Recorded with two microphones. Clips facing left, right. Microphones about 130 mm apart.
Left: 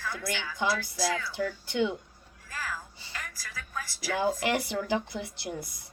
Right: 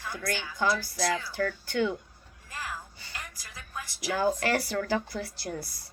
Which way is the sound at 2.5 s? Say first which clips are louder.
Left 1 dB; 20° right (ahead or behind).